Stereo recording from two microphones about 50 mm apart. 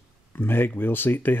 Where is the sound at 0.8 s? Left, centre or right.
Left.